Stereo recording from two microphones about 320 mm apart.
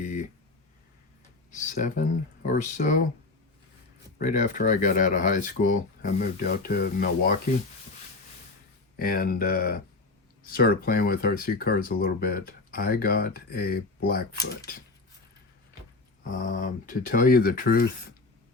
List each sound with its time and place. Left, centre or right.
1.5 s speech: left
4.2 s speech: left
9.0 s speech: left
16.4 s speech: left